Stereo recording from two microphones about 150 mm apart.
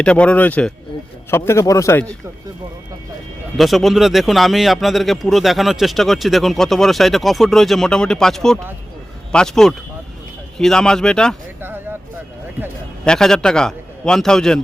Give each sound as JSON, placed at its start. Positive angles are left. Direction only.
{"t": 0.0, "sound": "a man's voice", "side_deg": 10}
{"t": 3.6, "sound": "speech", "side_deg": 0}
{"t": 13.1, "sound": "speech", "side_deg": 5}